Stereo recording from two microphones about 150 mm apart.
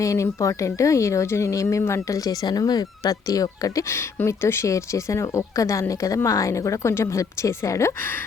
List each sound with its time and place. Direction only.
0.0 s speech: 20° left (ahead or behind)